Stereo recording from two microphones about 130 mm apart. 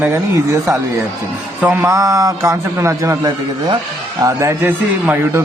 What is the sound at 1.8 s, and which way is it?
A man's voice, 25° right (ahead or behind).